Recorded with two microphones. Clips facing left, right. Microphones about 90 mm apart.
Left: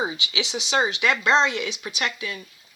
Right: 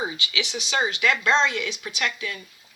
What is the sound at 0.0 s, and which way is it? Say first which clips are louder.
Speech: left 2 dB; 20° left (ahead or behind).